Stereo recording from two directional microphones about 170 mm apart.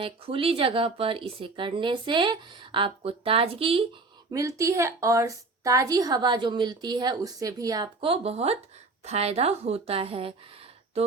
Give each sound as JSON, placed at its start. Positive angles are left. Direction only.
{"t": 0.0, "sound": "a woman's voice", "side_deg": -35}
{"t": 4.3, "sound": "a woman's voice", "side_deg": -20}